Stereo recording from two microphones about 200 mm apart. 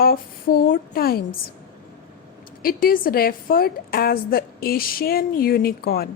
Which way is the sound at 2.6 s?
45° left (ahead or behind).